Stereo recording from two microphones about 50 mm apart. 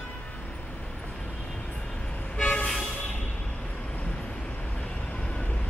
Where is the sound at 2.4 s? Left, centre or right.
Left.